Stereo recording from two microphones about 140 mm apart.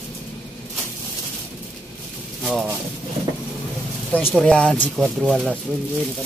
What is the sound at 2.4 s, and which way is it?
Speech, 5° right (ahead or behind).